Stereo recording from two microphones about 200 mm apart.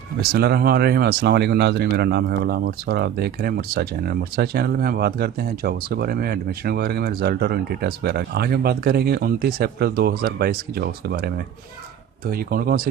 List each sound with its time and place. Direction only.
0.2 s speech: 50° right (ahead or behind)